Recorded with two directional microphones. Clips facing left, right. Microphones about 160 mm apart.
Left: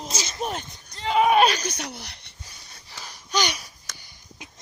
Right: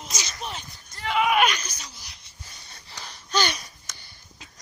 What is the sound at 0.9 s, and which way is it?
Speech, 25° left (ahead or behind).